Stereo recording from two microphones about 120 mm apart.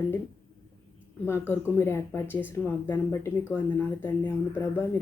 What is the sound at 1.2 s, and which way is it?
Speech, 20° left (ahead or behind).